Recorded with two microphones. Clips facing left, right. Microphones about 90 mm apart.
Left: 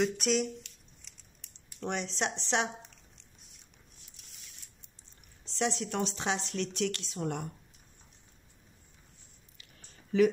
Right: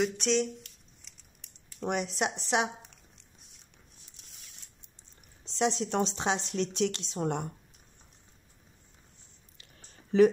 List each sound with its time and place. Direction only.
0.0 s speech: 5° left (ahead or behind)
1.8 s speech: 10° right (ahead or behind)
5.6 s a woman's voice: 20° right (ahead or behind)
10.1 s speech: 30° right (ahead or behind)